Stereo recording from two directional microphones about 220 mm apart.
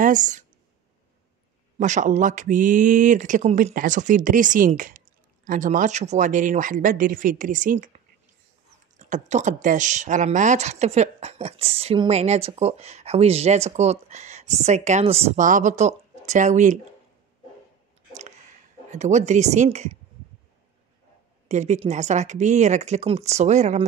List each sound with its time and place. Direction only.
0.0 s speech: 35° right (ahead or behind)
1.8 s speech: 35° right (ahead or behind)
18.9 s speech: 30° right (ahead or behind)
21.5 s speech: 30° right (ahead or behind)